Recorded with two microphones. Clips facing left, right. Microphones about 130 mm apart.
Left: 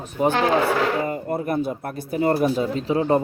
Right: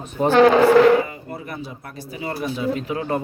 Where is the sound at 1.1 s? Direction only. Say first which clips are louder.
Left 9 dB; 50° left (ahead or behind).